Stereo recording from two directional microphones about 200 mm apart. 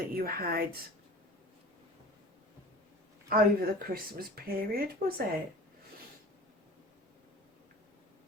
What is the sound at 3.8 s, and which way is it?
A woman's voice, 45° right (ahead or behind).